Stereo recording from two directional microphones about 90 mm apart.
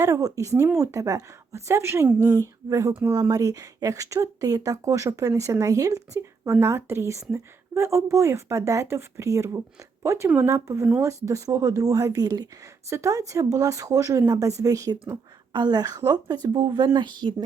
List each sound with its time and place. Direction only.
0.0 s speech: 40° right (ahead or behind)
10.2 s speech: 20° right (ahead or behind)
10.5 s a woman's voice: 35° right (ahead or behind); by 17.3 s 55° right (ahead or behind)